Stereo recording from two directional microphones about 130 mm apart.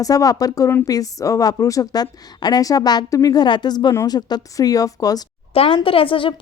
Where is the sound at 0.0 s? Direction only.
25° left (ahead or behind).